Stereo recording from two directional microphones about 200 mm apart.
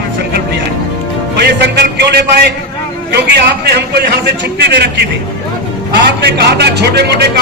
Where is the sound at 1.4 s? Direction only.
55° right (ahead or behind).